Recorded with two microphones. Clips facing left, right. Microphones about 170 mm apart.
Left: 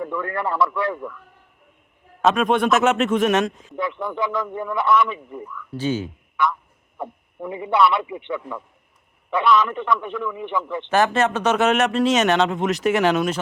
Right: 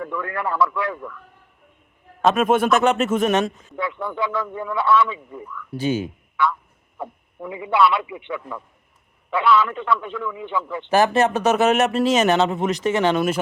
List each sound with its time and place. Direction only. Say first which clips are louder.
0.0 s speech: left 1 dB; 20° left (ahead or behind)
2.2 s speech: right 1 dB; 5° right (ahead or behind)
3.8 s a man's voice: left 1 dB; 20° left (ahead or behind)
5.7 s speech: right 1 dB; 15° right (ahead or behind)
6.3 s a sound: even; 20° left (ahead or behind)
7.4 s a man's voice: even; 25° left (ahead or behind)
9.3 s a man's voice: even; 20° left (ahead or behind)
10.8 s speech: right 2 dB; 10° right (ahead or behind)